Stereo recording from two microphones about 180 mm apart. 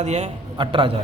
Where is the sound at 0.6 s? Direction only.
30° right (ahead or behind).